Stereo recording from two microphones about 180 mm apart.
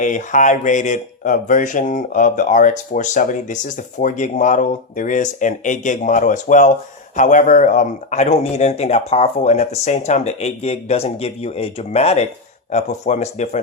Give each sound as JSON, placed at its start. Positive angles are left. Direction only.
{"t": 0.0, "sound": "a man's voice", "side_deg": 45}